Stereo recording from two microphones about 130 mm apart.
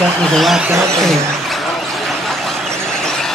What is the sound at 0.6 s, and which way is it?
Vehicle, 20° right (ahead or behind).